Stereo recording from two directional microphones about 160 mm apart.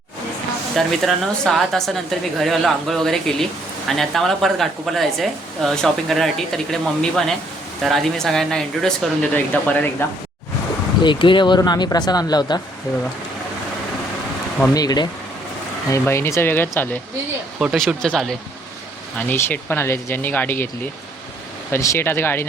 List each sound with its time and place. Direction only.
0.8 s speech: centre (ahead or behind)
11.0 s speech: 30° left (ahead or behind)
14.7 s speech: 25° left (ahead or behind)
17.6 s speech: centre (ahead or behind)
21.7 s speech: 15° left (ahead or behind)